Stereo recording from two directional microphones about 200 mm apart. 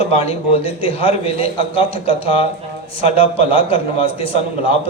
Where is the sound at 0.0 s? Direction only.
30° left (ahead or behind).